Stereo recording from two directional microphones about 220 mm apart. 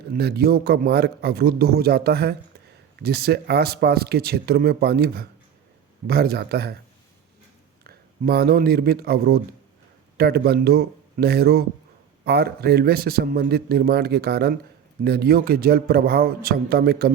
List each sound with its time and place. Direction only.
0.1 s speech: 45° right (ahead or behind)
7.9 s speech: 45° right (ahead or behind)